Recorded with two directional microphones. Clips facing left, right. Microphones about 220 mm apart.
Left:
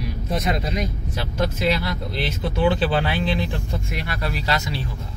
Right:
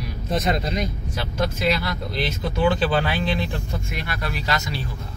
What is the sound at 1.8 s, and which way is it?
Speech, 30° left (ahead or behind).